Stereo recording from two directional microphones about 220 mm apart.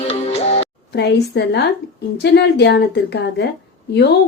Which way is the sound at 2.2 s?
50° left (ahead or behind).